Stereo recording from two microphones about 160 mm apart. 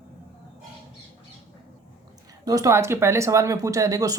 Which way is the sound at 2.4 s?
20° right (ahead or behind).